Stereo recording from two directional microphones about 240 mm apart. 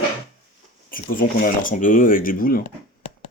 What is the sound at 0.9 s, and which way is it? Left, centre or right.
Speech, left.